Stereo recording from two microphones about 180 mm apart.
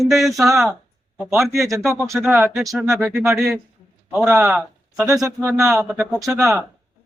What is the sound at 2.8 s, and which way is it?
Speech, 10° right (ahead or behind).